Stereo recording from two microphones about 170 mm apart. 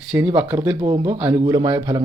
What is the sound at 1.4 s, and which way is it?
Speech, 25° right (ahead or behind).